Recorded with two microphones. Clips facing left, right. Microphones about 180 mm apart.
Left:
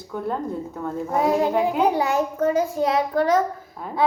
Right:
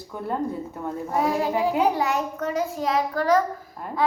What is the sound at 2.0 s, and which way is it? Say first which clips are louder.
Child singing: left 4 dB; 30° left (ahead or behind).